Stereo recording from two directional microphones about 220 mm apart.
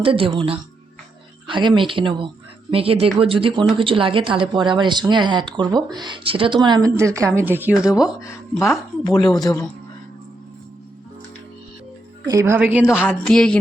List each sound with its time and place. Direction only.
0.0 s speech: 25° right (ahead or behind); by 8.1 s 5° right (ahead or behind)
8.2 s speech: 15° left (ahead or behind)
12.2 s speech: 15° right (ahead or behind)
13.0 s speech: 5° left (ahead or behind)